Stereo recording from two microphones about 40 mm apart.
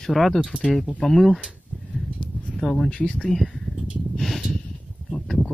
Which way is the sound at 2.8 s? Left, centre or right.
Left.